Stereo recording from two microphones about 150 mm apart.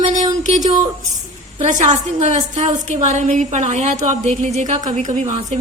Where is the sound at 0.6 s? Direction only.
25° right (ahead or behind).